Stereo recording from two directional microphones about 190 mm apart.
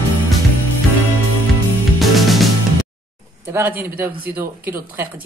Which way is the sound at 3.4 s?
10° right (ahead or behind).